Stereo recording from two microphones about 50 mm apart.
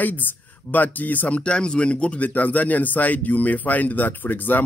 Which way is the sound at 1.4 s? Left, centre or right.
Centre.